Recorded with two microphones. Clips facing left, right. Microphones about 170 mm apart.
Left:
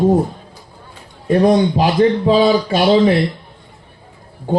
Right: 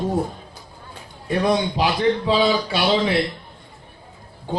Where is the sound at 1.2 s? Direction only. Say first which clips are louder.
Left 8 dB; 45° left (ahead or behind).